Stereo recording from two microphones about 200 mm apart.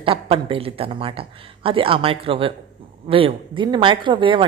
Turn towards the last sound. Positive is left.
turn(degrees=-25)  # may be behind; listen again after turning